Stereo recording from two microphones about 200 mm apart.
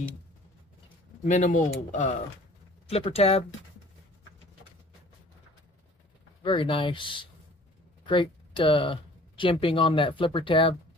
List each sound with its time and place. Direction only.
1.2 s speech: 40° left (ahead or behind)
6.4 s speech: 25° left (ahead or behind)